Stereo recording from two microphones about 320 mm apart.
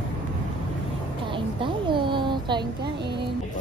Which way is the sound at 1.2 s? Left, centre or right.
Centre.